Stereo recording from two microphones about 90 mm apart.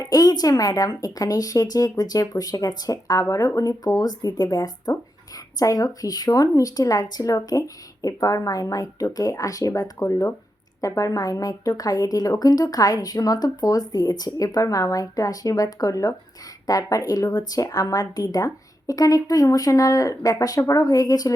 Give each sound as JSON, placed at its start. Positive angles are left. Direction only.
{"t": 0.0, "sound": "speech", "side_deg": 45}